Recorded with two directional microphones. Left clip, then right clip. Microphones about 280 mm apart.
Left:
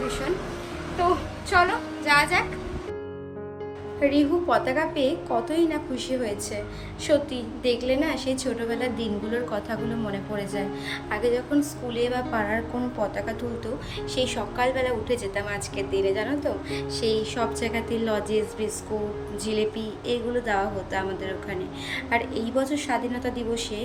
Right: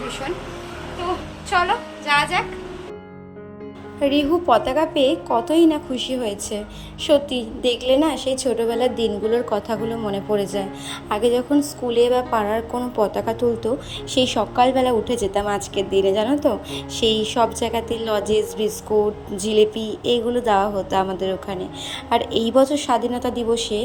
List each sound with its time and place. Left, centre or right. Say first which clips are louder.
1.5 s a woman's voice: right 2 dB; centre
4.0 s a woman's voice: right 4 dB; right
16.7 s music: right 5 dB; right
17.2 s a woman's voice: right 7 dB; centre